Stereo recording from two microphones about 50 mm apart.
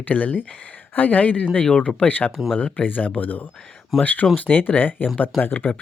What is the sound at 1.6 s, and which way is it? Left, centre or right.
Speech, left.